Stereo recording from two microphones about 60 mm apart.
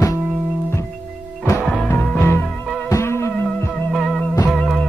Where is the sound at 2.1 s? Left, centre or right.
Left.